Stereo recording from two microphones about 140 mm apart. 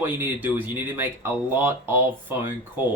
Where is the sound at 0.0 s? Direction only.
15° right (ahead or behind).